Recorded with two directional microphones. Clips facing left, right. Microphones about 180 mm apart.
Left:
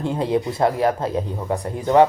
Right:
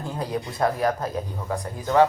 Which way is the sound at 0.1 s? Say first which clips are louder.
Left 7 dB; 25° left (ahead or behind).